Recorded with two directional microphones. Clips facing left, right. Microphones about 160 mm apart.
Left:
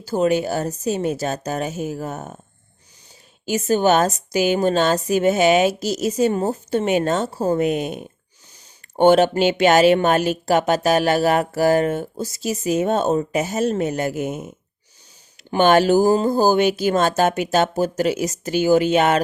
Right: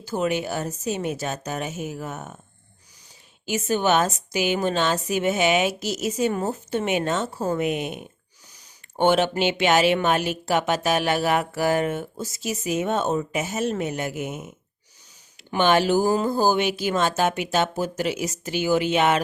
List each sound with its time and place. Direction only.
0.0 s speech: 35° left (ahead or behind)
3.4 s speech: 40° left (ahead or behind)